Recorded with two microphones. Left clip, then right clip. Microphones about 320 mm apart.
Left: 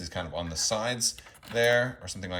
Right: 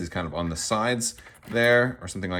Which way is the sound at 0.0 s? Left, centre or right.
Centre.